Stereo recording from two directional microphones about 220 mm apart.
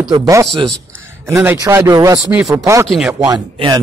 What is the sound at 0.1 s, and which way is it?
Speech, 15° right (ahead or behind).